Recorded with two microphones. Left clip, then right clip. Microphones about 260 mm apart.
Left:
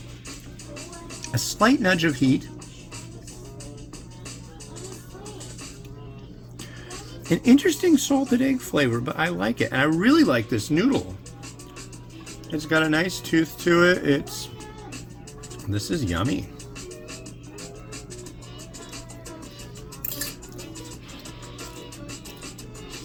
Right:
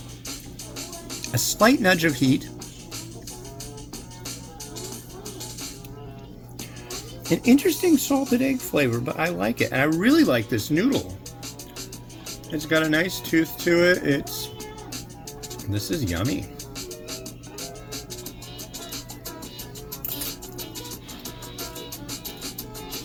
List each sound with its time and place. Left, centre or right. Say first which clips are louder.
1.2 s speech: right 2 dB; centre
4.8 s music: right 1 dB; right
7.4 s speech: left 1 dB; centre
12.5 s speech: even; centre
15.7 s speech: even; centre
16.0 s music: left 1 dB; right
21.2 s music: right 5 dB; right